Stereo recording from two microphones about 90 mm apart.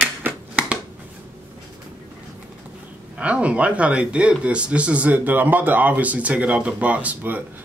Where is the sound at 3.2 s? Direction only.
15° right (ahead or behind).